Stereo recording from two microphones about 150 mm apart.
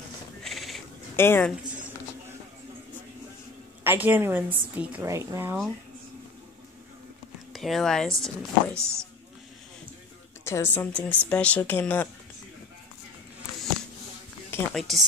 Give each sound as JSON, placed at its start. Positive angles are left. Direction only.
{"t": 0.4, "sound": "a sound", "side_deg": 0}
{"t": 1.1, "sound": "speech", "side_deg": 15}
{"t": 3.8, "sound": "a woman's voice", "side_deg": -15}
{"t": 5.0, "sound": "speech", "side_deg": -20}
{"t": 7.5, "sound": "speech", "side_deg": 0}
{"t": 8.7, "sound": "a woman's voice", "side_deg": -15}
{"t": 10.4, "sound": "speech", "side_deg": 15}
{"t": 14.7, "sound": "speech", "side_deg": 0}